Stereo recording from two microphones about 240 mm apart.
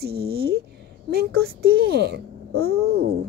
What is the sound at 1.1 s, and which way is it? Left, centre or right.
A woman's voice, right.